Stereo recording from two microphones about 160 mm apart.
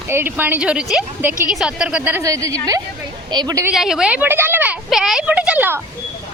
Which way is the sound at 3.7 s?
5° right (ahead or behind).